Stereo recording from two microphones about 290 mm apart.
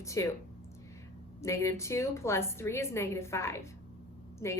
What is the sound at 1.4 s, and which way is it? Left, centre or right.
A woman's voice, centre.